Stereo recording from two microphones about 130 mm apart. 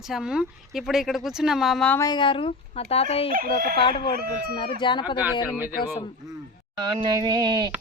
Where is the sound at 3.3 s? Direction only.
90° right.